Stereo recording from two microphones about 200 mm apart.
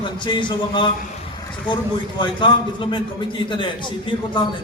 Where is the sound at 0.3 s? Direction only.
25° left (ahead or behind).